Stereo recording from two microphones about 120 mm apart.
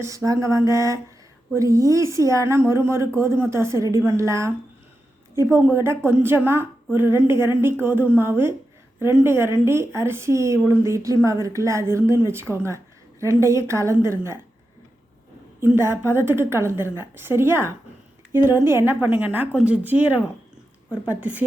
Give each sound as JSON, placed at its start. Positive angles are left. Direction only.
{"t": 0.0, "sound": "a woman's voice", "side_deg": -25}
{"t": 15.6, "sound": "a woman's voice", "side_deg": -20}